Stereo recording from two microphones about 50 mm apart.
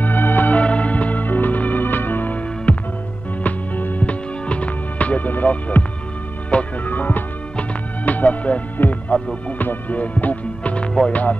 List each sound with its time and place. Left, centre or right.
0.0 s music: left
0.6 s music: left
2.7 s music: left
6.9 s music: left